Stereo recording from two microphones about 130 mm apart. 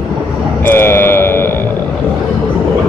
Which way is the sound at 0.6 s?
20° left (ahead or behind).